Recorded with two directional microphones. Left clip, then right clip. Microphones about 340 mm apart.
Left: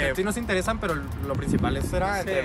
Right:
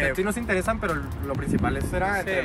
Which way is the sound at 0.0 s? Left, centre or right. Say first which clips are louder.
Right 1 dB; centre.